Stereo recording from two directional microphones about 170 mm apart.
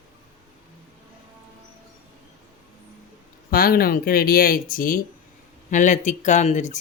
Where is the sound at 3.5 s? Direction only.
60° left (ahead or behind); by 6.8 s 45° left (ahead or behind).